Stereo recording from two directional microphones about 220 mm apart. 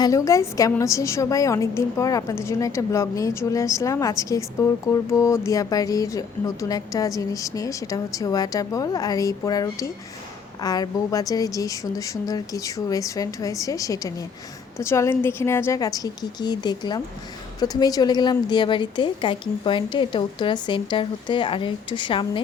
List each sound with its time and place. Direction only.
0.0 s a woman's voice: 15° left (ahead or behind)